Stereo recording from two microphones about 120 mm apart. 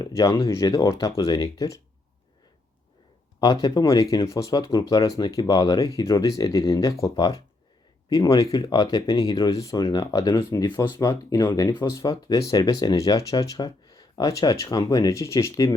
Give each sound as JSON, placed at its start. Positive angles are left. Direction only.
{"t": 0.0, "sound": "speech", "side_deg": 25}
{"t": 3.4, "sound": "speech", "side_deg": 30}